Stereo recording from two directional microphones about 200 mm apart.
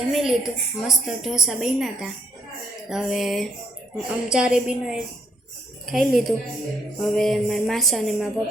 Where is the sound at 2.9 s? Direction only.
Centre (ahead or behind).